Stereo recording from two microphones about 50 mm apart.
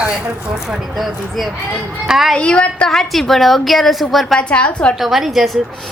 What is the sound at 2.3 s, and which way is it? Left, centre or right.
Speech, left.